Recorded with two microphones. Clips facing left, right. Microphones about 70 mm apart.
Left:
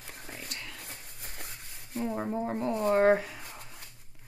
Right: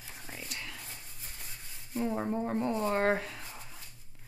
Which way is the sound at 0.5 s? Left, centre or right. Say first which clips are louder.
Even; centre.